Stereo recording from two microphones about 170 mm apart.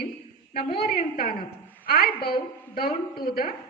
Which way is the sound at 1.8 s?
60° left (ahead or behind).